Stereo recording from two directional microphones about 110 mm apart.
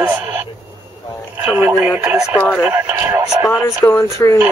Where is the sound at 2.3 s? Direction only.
10° left (ahead or behind).